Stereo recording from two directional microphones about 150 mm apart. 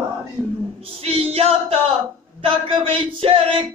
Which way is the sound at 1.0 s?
40° right (ahead or behind).